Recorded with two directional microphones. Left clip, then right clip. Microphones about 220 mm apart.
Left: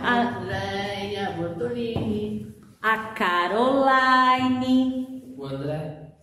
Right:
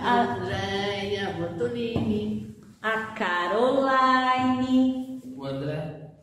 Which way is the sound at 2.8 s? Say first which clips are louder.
Left 4 dB; 35° left (ahead or behind).